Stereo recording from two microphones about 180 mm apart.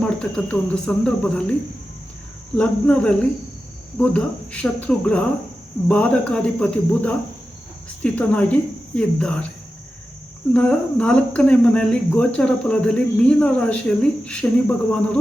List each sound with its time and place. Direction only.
0.0 s cricket: 5° left (ahead or behind)
2.6 s speech: 5° left (ahead or behind)
9.0 s cricket: 5° left (ahead or behind)
10.5 s speech: 5° left (ahead or behind)